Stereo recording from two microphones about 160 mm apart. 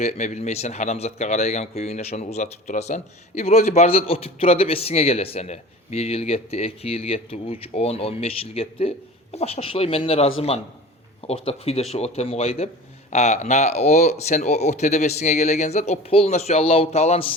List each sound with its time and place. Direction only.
0.0 s a man's voice: 45° left (ahead or behind)